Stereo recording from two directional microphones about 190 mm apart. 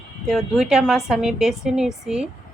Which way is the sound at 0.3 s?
Centre (ahead or behind).